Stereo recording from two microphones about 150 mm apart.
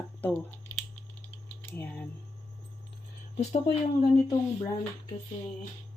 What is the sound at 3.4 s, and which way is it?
Speech, 45° left (ahead or behind).